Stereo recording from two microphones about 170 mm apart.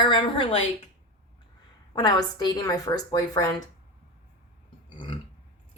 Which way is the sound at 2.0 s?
25° left (ahead or behind).